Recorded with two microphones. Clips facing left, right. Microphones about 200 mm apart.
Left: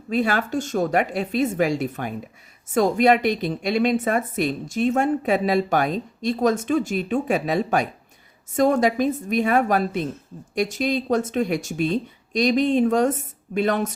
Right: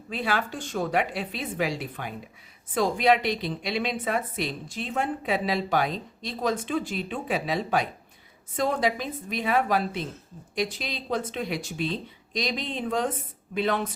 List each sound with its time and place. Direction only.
0.1 s a woman's voice: 45° left (ahead or behind)